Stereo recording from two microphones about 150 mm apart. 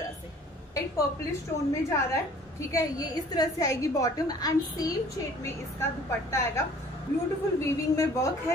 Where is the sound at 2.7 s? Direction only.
25° left (ahead or behind).